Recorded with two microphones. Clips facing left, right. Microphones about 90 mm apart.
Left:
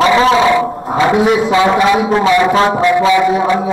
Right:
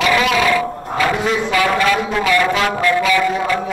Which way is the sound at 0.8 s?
20° left (ahead or behind).